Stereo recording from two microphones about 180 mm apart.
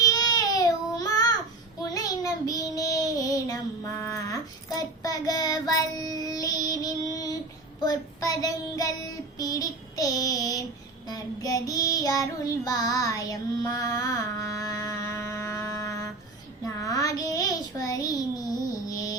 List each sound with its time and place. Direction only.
0.0 s baby cry: 20° left (ahead or behind)
1.8 s child singing: 20° left (ahead or behind)